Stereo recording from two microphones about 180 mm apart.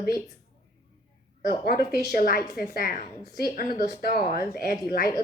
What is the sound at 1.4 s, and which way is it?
Speech, 55° left (ahead or behind).